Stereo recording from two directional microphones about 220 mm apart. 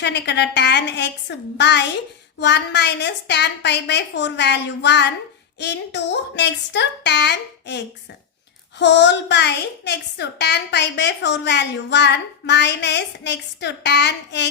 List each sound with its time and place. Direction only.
0.0 s a woman's voice: 50° left (ahead or behind)